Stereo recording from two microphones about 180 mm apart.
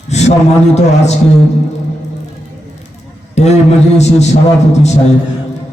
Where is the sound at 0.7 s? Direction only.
40° left (ahead or behind).